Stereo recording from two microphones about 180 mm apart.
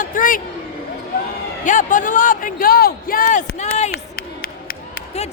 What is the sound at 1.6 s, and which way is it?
A man's voice, 45° left (ahead or behind).